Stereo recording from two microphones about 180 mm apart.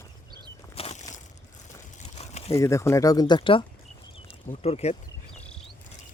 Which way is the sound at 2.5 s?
15° left (ahead or behind).